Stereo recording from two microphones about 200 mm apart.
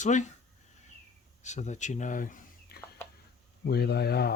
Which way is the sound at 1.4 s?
35° left (ahead or behind).